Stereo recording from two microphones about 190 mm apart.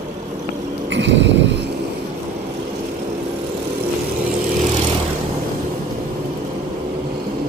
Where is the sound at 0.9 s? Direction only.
70° right (ahead or behind).